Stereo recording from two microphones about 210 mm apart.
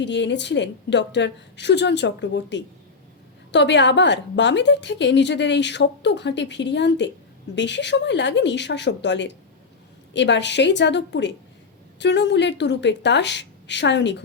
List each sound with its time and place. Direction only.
0.0 s a woman's voice: 55° left (ahead or behind)